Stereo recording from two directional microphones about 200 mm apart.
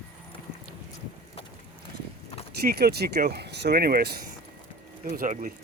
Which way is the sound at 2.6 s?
50° right (ahead or behind).